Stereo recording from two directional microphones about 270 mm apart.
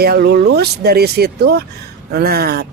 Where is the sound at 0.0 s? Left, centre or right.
Right.